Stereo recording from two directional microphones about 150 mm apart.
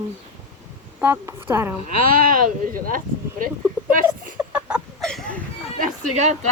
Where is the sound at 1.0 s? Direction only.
15° right (ahead or behind).